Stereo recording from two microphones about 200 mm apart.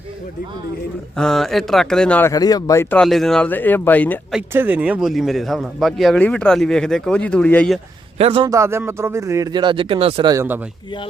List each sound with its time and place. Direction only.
1.1 s speech: 5° left (ahead or behind)
3.0 s speech: centre (ahead or behind)
4.4 s speech: 10° right (ahead or behind)
8.2 s a man's voice: 30° right (ahead or behind)
8.4 s speech: 15° right (ahead or behind)
10.3 s speech: 10° right (ahead or behind)